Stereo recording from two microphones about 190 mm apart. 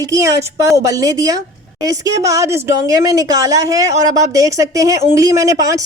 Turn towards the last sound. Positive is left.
turn(degrees=-15)  # may be behind; listen again after turning